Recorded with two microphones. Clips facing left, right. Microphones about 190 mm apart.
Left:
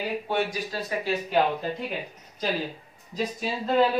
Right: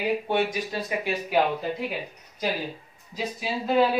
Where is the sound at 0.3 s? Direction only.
20° right (ahead or behind).